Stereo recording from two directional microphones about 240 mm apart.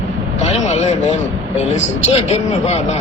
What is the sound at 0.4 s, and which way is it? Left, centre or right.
Speech, left.